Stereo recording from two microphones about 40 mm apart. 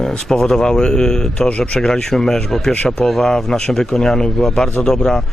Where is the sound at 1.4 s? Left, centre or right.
Left.